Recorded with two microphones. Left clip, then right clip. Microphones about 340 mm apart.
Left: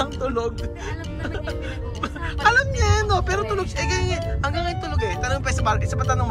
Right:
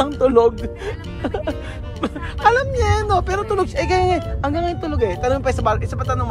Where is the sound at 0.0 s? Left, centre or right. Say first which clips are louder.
Right 10 dB; centre.